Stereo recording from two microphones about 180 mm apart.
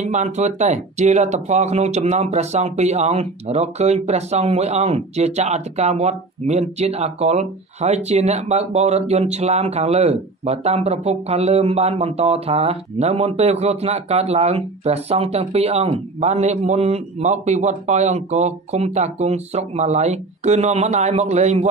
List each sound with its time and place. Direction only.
0.0 s speech: 40° right (ahead or behind)